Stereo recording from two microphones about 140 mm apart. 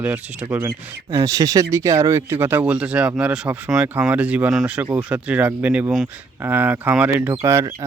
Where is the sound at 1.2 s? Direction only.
25° right (ahead or behind).